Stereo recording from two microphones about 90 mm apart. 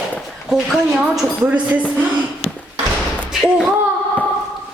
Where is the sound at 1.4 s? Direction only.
15° right (ahead or behind).